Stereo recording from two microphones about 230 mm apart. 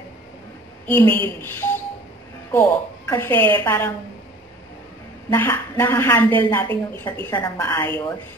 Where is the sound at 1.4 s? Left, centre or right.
Centre.